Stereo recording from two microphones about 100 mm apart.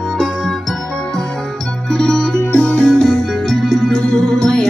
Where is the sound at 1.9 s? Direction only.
5° left (ahead or behind).